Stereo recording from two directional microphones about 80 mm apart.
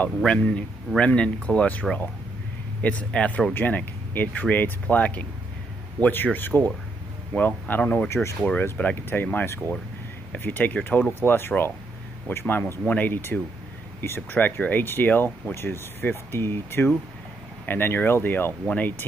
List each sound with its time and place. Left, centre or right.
0.2 s speech: centre
8.1 s speech: left
8.5 s speech: left